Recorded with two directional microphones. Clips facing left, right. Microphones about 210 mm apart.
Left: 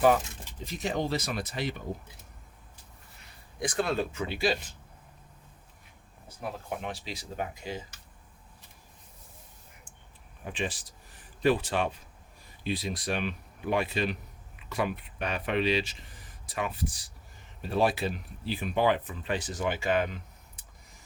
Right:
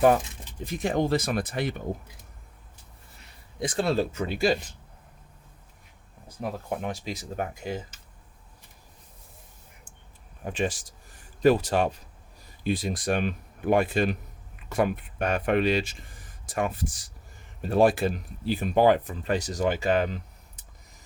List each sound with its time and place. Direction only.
0.6 s speech: 55° right (ahead or behind)
3.6 s speech: 25° right (ahead or behind); by 4.5 s 45° right (ahead or behind)
6.7 s speech: 45° right (ahead or behind)
10.4 s speech: 45° right (ahead or behind)